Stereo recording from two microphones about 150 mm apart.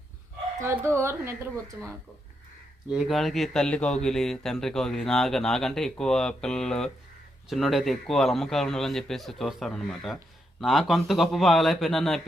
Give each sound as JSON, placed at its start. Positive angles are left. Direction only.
{"t": 0.9, "sound": "a woman's voice", "side_deg": -15}
{"t": 2.9, "sound": "speech", "side_deg": 0}